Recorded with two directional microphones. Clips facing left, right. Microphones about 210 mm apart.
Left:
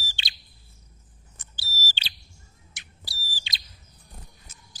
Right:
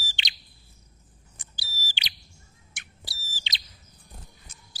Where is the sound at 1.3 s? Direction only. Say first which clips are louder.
Left 4 dB; 15° right (ahead or behind).